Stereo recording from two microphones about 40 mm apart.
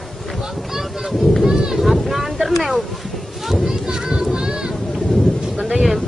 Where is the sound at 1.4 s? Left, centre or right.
Centre.